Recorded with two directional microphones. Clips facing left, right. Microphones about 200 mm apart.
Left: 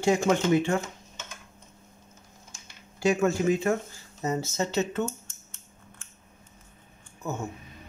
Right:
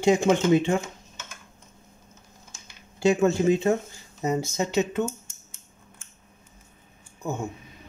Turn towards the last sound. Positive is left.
turn(degrees=-15)  # may be behind; listen again after turning